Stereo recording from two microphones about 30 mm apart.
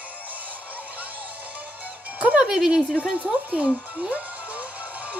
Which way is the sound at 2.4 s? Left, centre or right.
Centre.